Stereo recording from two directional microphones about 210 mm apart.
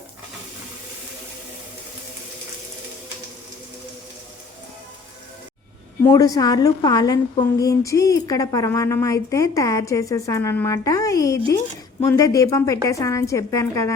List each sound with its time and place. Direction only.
6.0 s a woman's voice: 15° left (ahead or behind)